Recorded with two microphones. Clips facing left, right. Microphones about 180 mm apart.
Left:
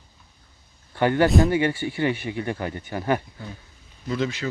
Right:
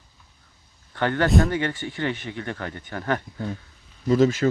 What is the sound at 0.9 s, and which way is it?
Speech, 10° left (ahead or behind).